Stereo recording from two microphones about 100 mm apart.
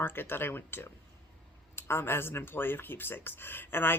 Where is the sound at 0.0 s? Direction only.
20° left (ahead or behind).